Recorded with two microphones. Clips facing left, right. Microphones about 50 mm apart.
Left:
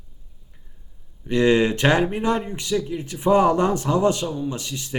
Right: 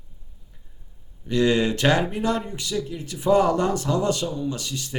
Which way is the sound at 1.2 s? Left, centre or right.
Left.